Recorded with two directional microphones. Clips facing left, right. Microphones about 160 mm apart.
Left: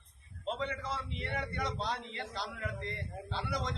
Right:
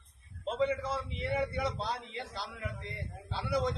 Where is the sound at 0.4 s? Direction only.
5° right (ahead or behind).